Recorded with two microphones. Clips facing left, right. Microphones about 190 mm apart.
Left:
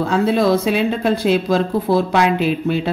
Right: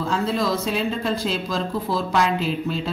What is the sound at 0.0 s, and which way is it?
Speech, 65° left (ahead or behind).